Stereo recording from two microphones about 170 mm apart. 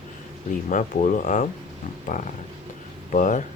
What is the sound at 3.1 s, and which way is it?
Speech, 50° left (ahead or behind).